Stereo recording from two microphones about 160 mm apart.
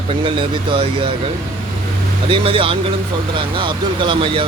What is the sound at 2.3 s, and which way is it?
Speech, 35° right (ahead or behind).